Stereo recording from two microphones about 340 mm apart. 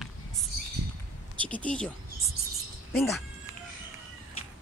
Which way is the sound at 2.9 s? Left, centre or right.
Centre.